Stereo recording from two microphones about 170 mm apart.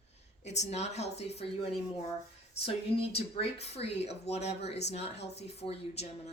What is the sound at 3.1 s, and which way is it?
A woman's voice, 35° left (ahead or behind).